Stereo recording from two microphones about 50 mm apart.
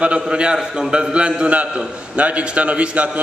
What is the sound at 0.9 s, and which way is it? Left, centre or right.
A man's voice, centre.